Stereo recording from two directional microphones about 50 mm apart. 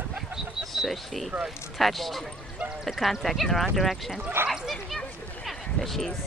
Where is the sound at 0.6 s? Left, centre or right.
Centre.